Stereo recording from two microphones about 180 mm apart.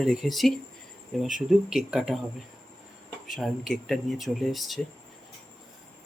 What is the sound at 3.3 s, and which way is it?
Speech, centre (ahead or behind).